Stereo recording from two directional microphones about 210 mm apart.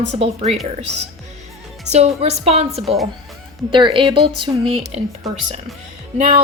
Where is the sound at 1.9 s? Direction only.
30° right (ahead or behind).